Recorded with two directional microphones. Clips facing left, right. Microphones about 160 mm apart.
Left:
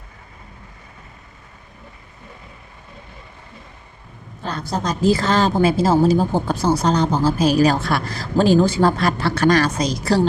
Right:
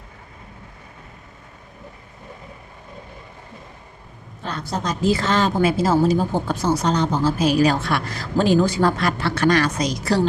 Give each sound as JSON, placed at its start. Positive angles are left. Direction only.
{"t": 4.4, "sound": "speech", "side_deg": 35}